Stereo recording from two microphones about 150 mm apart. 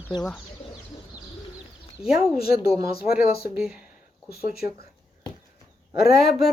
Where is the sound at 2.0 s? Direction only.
5° right (ahead or behind).